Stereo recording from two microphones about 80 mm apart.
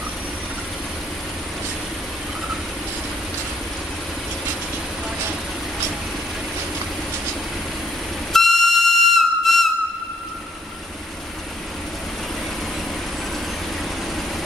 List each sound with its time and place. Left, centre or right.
8.3 s whistle: centre